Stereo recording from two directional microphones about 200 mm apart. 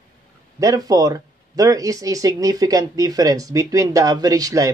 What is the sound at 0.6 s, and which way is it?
Speech, 15° right (ahead or behind).